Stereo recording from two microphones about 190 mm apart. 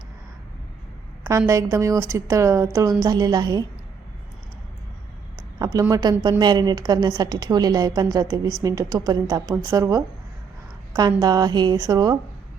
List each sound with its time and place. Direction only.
1.5 s a woman's voice: 15° right (ahead or behind)
5.5 s a woman's voice: 20° right (ahead or behind)